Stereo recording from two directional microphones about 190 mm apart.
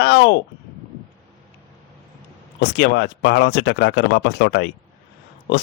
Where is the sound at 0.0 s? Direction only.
65° left (ahead or behind).